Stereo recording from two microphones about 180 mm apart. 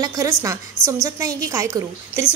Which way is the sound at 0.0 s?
20° right (ahead or behind).